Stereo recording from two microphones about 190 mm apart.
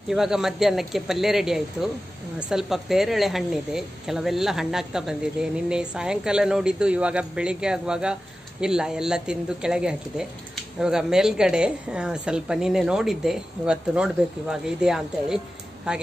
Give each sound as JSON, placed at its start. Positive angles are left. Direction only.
{"t": 0.1, "sound": "a woman's voice", "side_deg": 0}